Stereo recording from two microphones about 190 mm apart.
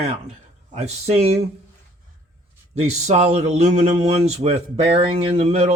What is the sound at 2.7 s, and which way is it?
Speech, 35° right (ahead or behind).